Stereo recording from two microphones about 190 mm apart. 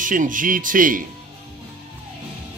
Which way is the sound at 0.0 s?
45° right (ahead or behind).